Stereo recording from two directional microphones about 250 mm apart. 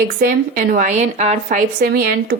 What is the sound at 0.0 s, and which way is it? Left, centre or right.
A woman's voice, right.